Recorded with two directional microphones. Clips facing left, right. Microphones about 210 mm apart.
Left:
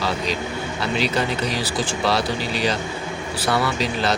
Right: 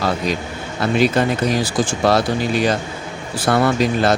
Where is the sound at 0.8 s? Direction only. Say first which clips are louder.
Right 7 dB; 50° right (ahead or behind).